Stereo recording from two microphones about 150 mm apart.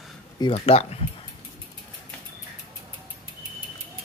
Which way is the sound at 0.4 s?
40° left (ahead or behind).